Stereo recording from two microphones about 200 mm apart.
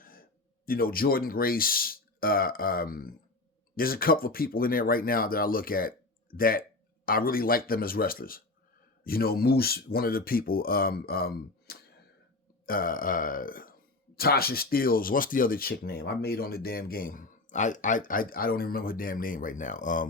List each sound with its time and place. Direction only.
0.0 s speech: 45° left (ahead or behind)